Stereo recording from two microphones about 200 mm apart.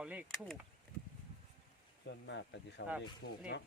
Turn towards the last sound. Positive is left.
turn(degrees=55)  # may be behind; listen again after turning